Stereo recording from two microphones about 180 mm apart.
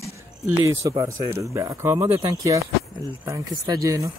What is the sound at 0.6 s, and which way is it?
A man's voice, 20° right (ahead or behind).